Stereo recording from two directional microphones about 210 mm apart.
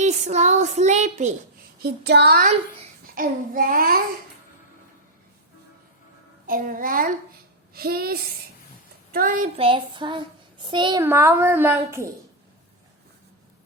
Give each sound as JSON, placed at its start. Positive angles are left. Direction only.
{"t": 0.0, "sound": "speech", "side_deg": -35}
{"t": 1.8, "sound": "child singing", "side_deg": -50}
{"t": 6.5, "sound": "a child's voice", "side_deg": -40}
{"t": 7.7, "sound": "child singing", "side_deg": -45}
{"t": 9.1, "sound": "a child's voice", "side_deg": -40}
{"t": 9.6, "sound": "a child's voice", "side_deg": -25}
{"t": 11.0, "sound": "a woman's voice", "side_deg": -10}